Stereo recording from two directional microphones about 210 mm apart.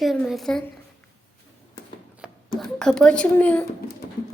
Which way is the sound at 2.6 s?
5° left (ahead or behind).